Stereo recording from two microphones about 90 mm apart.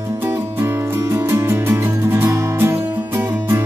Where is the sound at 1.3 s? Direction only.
25° right (ahead or behind).